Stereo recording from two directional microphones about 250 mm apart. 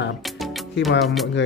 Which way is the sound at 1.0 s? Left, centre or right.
Centre.